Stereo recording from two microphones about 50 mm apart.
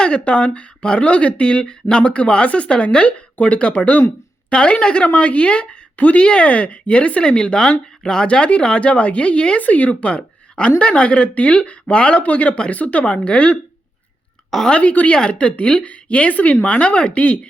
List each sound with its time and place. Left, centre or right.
0.0 s a woman's voice: left
14.7 s a woman's voice: left